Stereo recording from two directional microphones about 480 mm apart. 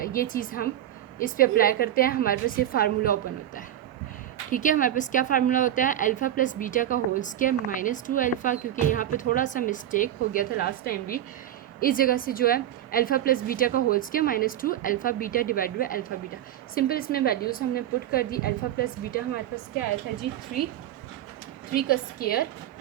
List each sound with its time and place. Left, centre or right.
0.0 s a woman's voice: centre
21.7 s a woman's voice: centre